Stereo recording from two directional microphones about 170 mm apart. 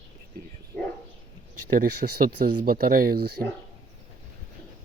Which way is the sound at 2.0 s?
45° right (ahead or behind).